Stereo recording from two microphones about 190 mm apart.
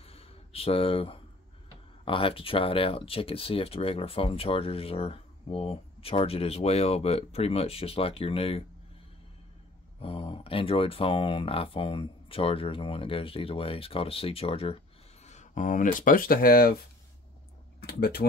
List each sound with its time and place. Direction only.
0.0 s a sound: 30° left (ahead or behind)
2.0 s speech: 30° left (ahead or behind)
9.9 s speech: 30° left (ahead or behind); by 16.7 s 50° left (ahead or behind)
17.7 s speech: 55° left (ahead or behind)